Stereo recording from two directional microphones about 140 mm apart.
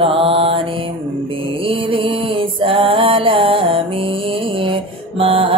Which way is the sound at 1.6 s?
40° right (ahead or behind).